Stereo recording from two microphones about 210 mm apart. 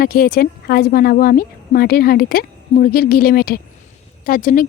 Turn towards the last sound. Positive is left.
turn(degrees=40)  # may be behind; listen again after turning